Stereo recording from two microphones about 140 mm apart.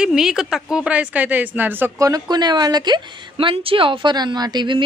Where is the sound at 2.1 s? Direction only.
30° right (ahead or behind).